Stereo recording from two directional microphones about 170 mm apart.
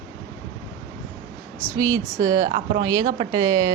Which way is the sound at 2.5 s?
30° right (ahead or behind).